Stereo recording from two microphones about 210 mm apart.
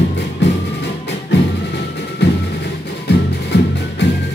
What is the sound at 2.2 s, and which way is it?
Music, 55° left (ahead or behind).